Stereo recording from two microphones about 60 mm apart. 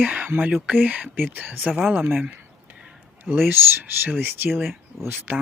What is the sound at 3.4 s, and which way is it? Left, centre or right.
Speech, right.